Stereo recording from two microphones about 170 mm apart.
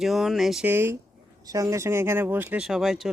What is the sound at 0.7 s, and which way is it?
Speech, 15° right (ahead or behind).